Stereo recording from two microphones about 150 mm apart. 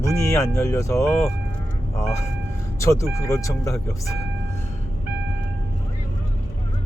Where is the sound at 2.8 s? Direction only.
20° left (ahead or behind).